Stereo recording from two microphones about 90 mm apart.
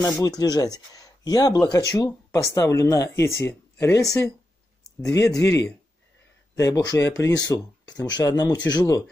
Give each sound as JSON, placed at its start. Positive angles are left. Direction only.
{"t": 0.0, "sound": "speech", "side_deg": 45}